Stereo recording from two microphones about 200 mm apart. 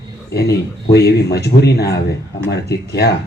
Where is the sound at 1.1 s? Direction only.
55° left (ahead or behind).